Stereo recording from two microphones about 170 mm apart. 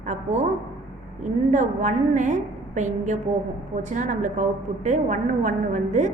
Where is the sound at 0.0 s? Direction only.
45° right (ahead or behind).